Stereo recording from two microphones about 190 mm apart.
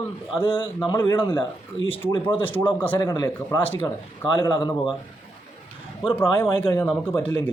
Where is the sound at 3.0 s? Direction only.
20° left (ahead or behind).